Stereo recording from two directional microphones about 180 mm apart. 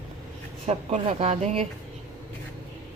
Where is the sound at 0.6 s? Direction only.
35° right (ahead or behind).